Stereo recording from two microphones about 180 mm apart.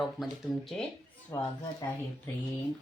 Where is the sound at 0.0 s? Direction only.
Centre (ahead or behind).